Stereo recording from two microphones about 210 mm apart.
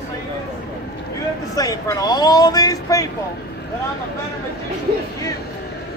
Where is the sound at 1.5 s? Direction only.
15° left (ahead or behind).